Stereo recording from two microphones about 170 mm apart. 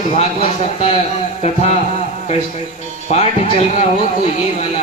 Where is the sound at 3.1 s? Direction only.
40° left (ahead or behind).